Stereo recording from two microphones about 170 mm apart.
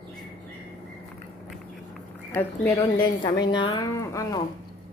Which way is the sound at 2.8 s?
25° left (ahead or behind).